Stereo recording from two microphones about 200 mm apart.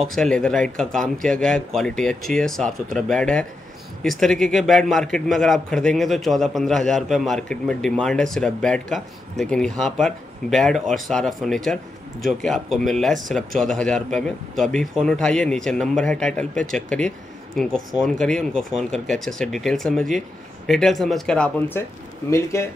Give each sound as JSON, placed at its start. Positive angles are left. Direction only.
{"t": 0.0, "sound": "a man's voice", "side_deg": 0}